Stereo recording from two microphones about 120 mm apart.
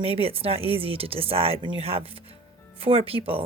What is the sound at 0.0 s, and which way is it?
Speech, 55° right (ahead or behind).